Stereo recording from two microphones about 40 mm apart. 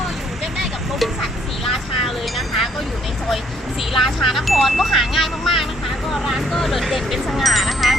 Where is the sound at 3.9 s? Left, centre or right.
Centre.